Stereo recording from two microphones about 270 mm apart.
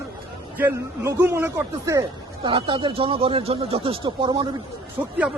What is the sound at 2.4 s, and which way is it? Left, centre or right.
Speech, centre.